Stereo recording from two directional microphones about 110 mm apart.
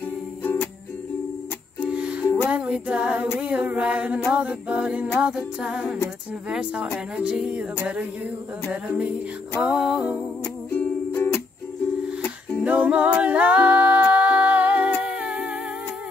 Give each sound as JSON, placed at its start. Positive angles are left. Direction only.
{"t": 0.4, "sound": "music", "side_deg": 20}
{"t": 1.8, "sound": "music", "side_deg": -10}
{"t": 10.7, "sound": "music", "side_deg": 20}
{"t": 12.6, "sound": "a capella", "side_deg": -15}